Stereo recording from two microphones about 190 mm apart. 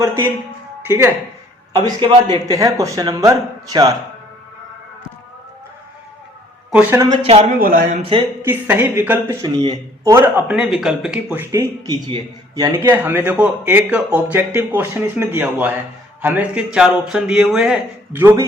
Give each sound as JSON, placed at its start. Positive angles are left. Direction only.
{"t": 0.9, "sound": "speech", "side_deg": -15}
{"t": 1.7, "sound": "a man's voice", "side_deg": -25}
{"t": 6.9, "sound": "speech", "side_deg": -15}
{"t": 7.2, "sound": "speech", "side_deg": -30}
{"t": 7.6, "sound": "speech", "side_deg": -45}
{"t": 8.0, "sound": "a man's voice", "side_deg": -25}
{"t": 8.4, "sound": "speech", "side_deg": -10}
{"t": 9.4, "sound": "a man's voice", "side_deg": -25}